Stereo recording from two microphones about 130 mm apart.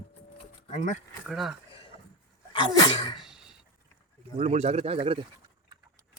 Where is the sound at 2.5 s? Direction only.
35° left (ahead or behind).